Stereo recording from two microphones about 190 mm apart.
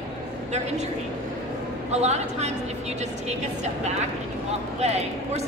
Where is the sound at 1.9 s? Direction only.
35° right (ahead or behind).